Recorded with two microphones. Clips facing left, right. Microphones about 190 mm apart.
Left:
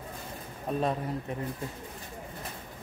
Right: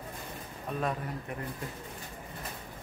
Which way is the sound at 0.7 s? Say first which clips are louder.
Left 4 dB; 30° left (ahead or behind).